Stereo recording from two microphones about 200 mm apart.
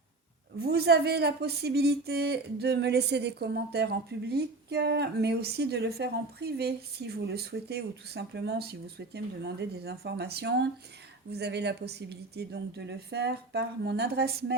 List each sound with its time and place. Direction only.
0.6 s speech: 55° right (ahead or behind)